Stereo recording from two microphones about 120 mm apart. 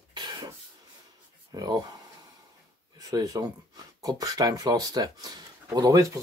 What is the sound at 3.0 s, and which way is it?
Speech, 30° right (ahead or behind).